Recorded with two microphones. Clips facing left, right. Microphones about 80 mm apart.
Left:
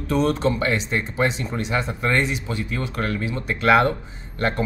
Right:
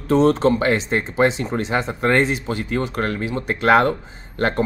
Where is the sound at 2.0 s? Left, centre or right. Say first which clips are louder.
Right 7 dB; right.